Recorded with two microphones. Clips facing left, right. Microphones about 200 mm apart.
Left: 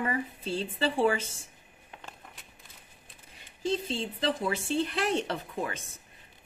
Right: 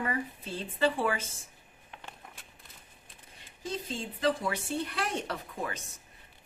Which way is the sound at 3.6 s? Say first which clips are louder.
Left 6 dB; 25° left (ahead or behind).